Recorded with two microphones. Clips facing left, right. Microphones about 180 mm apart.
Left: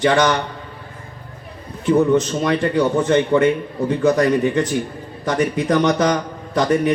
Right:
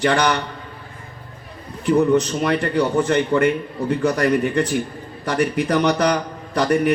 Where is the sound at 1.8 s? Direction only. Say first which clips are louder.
Left 1 dB; 20° left (ahead or behind).